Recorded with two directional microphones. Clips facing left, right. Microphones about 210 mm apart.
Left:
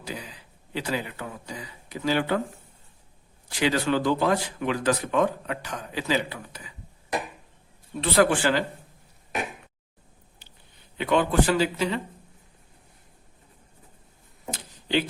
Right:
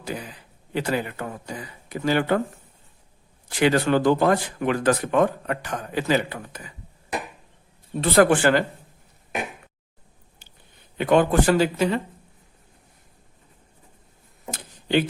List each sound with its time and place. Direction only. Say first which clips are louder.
0.0 s speech: right 4 dB; 50° right (ahead or behind)
3.5 s speech: right 4 dB; 50° right (ahead or behind)
8.1 s speech: right 4 dB; 50° right (ahead or behind)
10.4 s a sound: right 1 dB; 50° right (ahead or behind)
10.9 s speech: right 4 dB; 50° right (ahead or behind)
14.5 s a sound: right 4 dB; 50° right (ahead or behind)